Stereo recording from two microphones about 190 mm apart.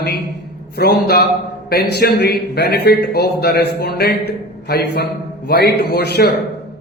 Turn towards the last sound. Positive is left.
turn(degrees=60)  # may be behind; listen again after turning